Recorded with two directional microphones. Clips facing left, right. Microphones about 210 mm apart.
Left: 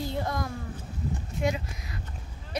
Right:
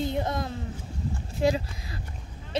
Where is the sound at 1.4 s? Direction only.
30° right (ahead or behind).